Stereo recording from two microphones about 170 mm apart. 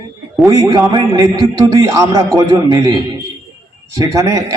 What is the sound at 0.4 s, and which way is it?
A man's voice, 20° right (ahead or behind).